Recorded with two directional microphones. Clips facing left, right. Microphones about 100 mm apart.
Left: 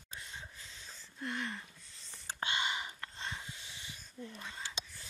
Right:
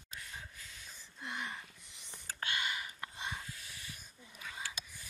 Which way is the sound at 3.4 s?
20° left (ahead or behind).